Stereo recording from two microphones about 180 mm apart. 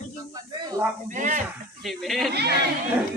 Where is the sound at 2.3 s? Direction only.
65° right (ahead or behind).